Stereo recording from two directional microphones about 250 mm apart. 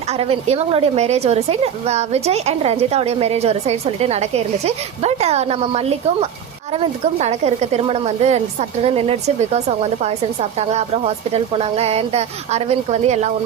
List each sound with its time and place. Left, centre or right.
0.2 s a woman's voice: right